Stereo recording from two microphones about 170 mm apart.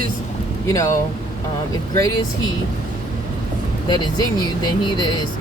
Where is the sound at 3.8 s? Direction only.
25° left (ahead or behind).